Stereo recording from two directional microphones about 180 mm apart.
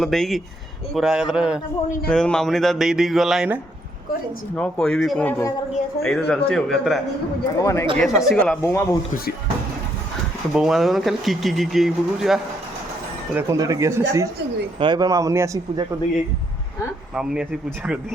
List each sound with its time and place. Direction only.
0.0 s speech: centre (ahead or behind)
7.6 s speech: 15° left (ahead or behind)
7.9 s speech: centre (ahead or behind)
8.6 s speech: 15° left (ahead or behind)
10.5 s speech: centre (ahead or behind)
13.3 s speech: 15° right (ahead or behind)
14.8 s a man's voice: 25° right (ahead or behind)
17.2 s speech: 5° right (ahead or behind)